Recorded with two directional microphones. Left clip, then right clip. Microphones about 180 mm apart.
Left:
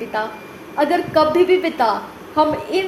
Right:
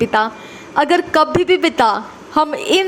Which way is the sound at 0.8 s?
45° right (ahead or behind).